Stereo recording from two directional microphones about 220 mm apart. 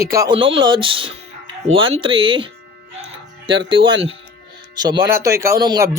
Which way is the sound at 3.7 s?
20° right (ahead or behind).